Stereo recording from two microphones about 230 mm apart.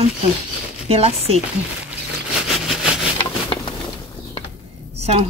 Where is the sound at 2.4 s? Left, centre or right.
Centre.